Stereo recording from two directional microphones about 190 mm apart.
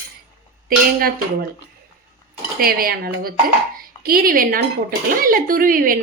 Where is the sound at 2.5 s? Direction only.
50° right (ahead or behind).